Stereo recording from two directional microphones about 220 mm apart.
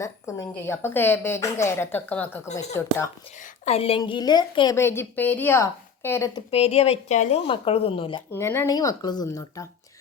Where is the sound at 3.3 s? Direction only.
35° left (ahead or behind); by 6.4 s 15° left (ahead or behind).